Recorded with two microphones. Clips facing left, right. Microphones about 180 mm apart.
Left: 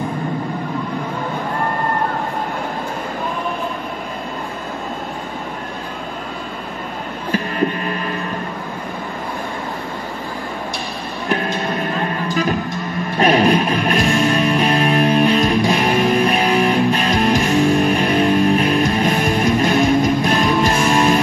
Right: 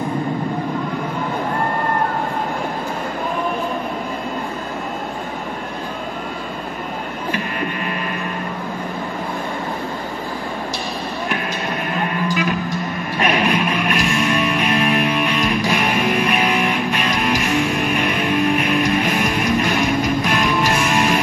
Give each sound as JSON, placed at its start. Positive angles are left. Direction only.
{"t": 13.2, "sound": "music", "side_deg": 30}